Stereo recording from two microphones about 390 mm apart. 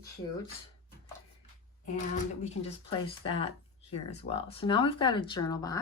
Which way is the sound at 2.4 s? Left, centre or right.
Centre.